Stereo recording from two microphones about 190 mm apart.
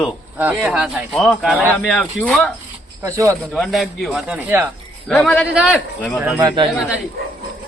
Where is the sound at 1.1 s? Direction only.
5° left (ahead or behind).